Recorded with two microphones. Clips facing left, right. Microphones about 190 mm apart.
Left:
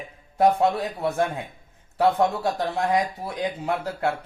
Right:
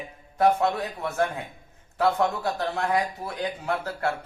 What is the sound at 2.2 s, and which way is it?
Speech, 15° left (ahead or behind).